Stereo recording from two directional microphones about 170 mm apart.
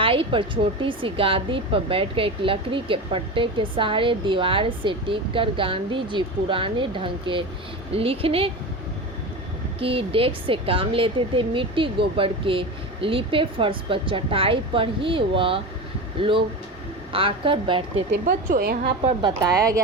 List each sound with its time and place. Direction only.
0.0 s speech: 30° right (ahead or behind)
9.8 s speech: 30° right (ahead or behind)
17.1 s speech: 30° right (ahead or behind)
18.3 s a woman's voice: 55° right (ahead or behind)
19.4 s speech: 20° right (ahead or behind)